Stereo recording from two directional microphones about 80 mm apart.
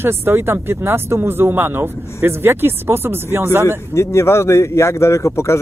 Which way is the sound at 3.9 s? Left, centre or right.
Left.